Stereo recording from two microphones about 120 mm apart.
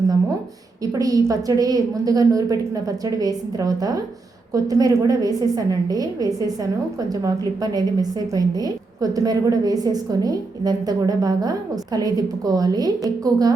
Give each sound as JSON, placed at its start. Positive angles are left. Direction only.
{"t": 0.9, "sound": "a woman's voice", "side_deg": -30}